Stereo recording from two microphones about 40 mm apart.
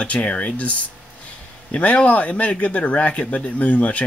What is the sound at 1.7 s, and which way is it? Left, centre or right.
Speech, left.